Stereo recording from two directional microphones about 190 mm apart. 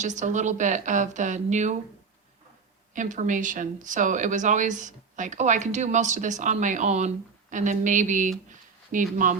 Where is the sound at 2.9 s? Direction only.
40° right (ahead or behind).